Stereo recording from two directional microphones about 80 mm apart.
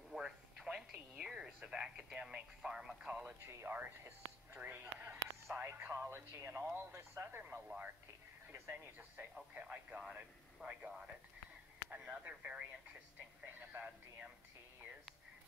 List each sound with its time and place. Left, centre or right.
0.1 s a sound: centre
1.3 s radio: centre
3.3 s speech: right
7.6 s radio: centre
8.5 s speech: right
9.5 s speech: centre
10.1 s a sound: centre
11.9 s speech: centre
13.6 s a sound: right